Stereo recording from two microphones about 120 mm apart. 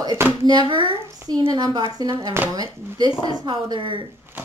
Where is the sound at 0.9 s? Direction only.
25° right (ahead or behind).